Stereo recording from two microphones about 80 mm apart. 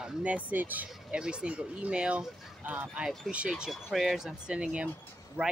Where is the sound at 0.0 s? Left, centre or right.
Centre.